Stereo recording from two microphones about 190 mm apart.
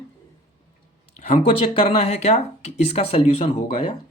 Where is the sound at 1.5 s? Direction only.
30° left (ahead or behind).